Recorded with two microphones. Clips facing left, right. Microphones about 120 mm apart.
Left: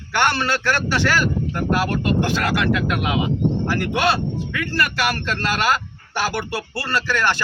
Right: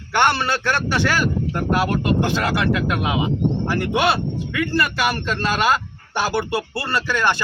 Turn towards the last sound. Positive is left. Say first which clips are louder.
# right 1 dB
turn(degrees=-20)  # may be behind; listen again after turning